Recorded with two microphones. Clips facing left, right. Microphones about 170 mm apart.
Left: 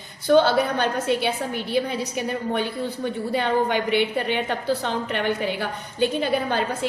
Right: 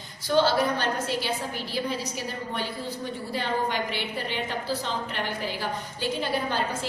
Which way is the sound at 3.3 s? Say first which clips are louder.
Left 6 dB; 60° left (ahead or behind).